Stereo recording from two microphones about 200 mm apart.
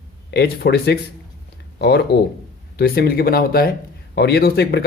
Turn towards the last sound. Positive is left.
turn(degrees=55)  # may be behind; listen again after turning